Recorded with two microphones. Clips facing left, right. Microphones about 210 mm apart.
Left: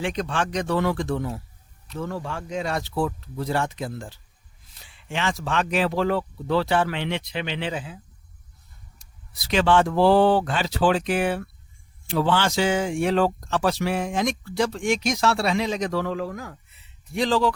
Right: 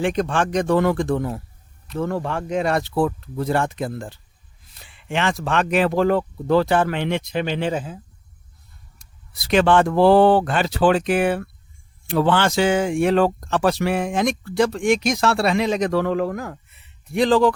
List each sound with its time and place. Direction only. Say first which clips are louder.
0.0 s speech: right 5 dB; 50° right (ahead or behind)
9.0 s speech: right 2 dB; 55° right (ahead or behind)